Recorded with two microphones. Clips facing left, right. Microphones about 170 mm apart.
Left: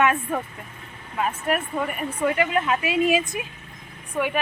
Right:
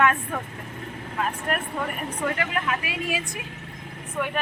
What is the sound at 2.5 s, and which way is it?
Speech, 25° left (ahead or behind).